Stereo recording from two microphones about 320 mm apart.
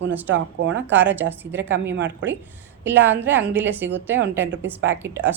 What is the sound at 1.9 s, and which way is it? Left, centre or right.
Speech, right.